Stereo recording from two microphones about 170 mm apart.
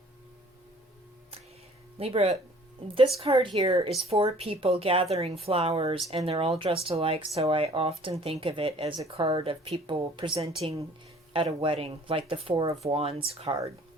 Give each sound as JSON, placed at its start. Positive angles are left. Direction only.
{"t": 2.0, "sound": "speech", "side_deg": -35}